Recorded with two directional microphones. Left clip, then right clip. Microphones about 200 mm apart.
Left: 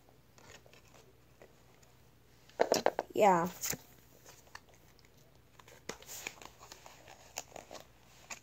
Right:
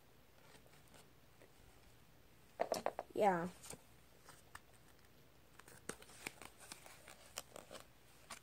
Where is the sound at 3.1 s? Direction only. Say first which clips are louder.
Left 8 dB; centre (ahead or behind).